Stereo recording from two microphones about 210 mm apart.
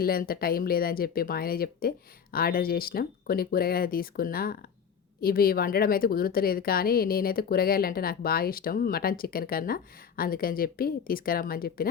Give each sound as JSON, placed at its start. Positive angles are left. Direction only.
{"t": 0.0, "sound": "speech", "side_deg": 45}